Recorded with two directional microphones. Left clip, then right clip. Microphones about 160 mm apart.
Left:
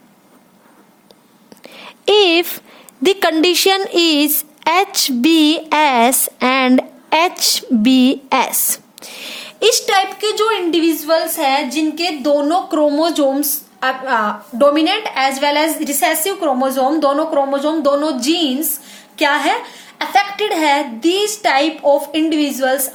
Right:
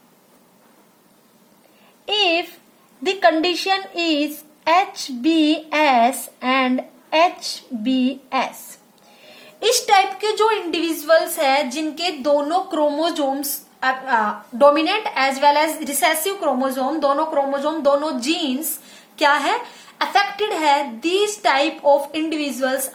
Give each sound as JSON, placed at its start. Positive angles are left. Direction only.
{"t": 2.0, "sound": "a woman's voice", "side_deg": 85}
{"t": 3.0, "sound": "a woman's voice", "side_deg": 70}
{"t": 9.4, "sound": "a woman's voice", "side_deg": 40}
{"t": 10.7, "sound": "a woman's voice", "side_deg": 0}
{"t": 11.0, "sound": "a woman's voice", "side_deg": -10}
{"t": 12.3, "sound": "a woman's voice", "side_deg": 15}
{"t": 14.6, "sound": "a woman's voice", "side_deg": 10}